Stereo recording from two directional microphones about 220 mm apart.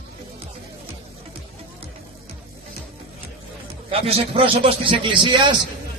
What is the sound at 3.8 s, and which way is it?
A man's voice, 25° right (ahead or behind).